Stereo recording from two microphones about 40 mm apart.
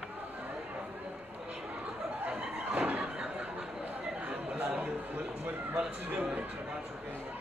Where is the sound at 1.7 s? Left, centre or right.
Right.